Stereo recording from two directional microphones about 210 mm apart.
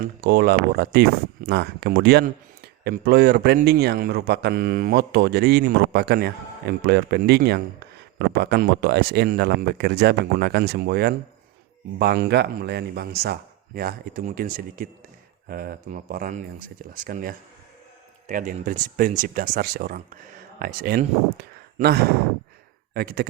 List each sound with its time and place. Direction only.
0.0 s speech: 45° right (ahead or behind)